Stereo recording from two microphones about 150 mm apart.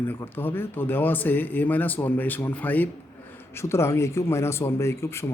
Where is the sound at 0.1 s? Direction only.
15° left (ahead or behind).